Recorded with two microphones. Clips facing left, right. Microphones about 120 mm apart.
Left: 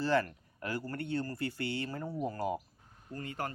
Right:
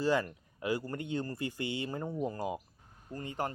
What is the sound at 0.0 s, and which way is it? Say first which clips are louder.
Speech: even; 15° right (ahead or behind).